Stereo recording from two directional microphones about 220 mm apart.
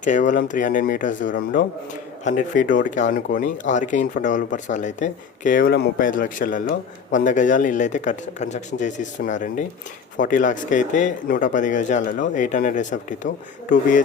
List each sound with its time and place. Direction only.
0.0 s speech: 35° left (ahead or behind)